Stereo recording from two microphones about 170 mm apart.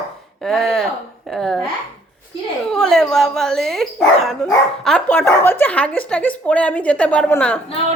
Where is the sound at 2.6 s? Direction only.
5° left (ahead or behind).